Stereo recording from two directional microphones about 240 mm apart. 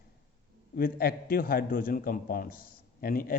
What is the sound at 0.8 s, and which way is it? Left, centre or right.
A man's voice, left.